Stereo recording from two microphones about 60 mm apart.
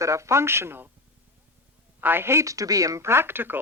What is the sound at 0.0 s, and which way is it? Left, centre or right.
Speech, right.